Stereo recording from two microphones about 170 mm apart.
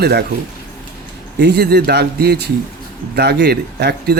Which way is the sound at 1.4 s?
75° right (ahead or behind).